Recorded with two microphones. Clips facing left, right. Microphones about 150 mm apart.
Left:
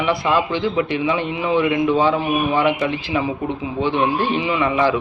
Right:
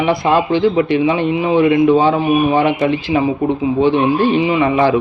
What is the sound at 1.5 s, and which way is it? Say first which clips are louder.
Speech: right 6 dB; 50° right (ahead or behind).